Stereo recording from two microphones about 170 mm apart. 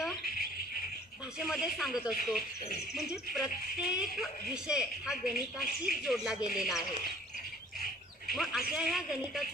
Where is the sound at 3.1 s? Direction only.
75° left (ahead or behind).